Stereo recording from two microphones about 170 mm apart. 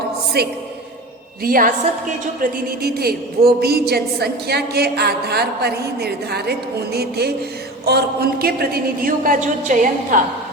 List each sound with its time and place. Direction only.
0.4 s a woman's voice: 70° right (ahead or behind)
1.4 s a woman's voice: 55° right (ahead or behind)